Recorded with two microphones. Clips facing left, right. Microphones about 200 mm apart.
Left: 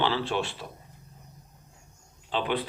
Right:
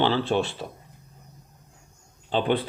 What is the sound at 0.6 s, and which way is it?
Speech, 25° right (ahead or behind).